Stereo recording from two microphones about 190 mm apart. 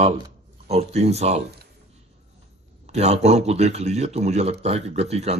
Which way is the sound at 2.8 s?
35° right (ahead or behind).